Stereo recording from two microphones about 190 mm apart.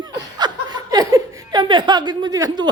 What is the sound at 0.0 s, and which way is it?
Chuckle, 20° right (ahead or behind).